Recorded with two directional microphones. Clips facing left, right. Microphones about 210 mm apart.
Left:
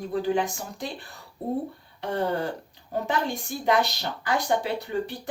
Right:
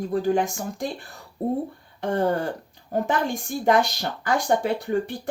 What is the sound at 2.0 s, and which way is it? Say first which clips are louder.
Speech: right 4 dB; 50° right (ahead or behind).